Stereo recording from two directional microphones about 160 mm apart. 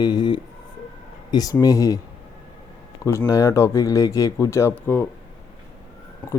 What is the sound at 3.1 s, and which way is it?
Speech, 20° left (ahead or behind).